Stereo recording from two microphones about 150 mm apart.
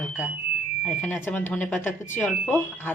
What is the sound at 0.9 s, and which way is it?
Speech, 10° left (ahead or behind).